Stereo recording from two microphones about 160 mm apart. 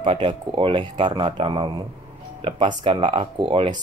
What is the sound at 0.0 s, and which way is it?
Speech, 30° right (ahead or behind).